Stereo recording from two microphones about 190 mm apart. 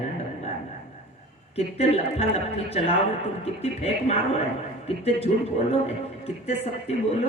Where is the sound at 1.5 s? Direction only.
30° left (ahead or behind).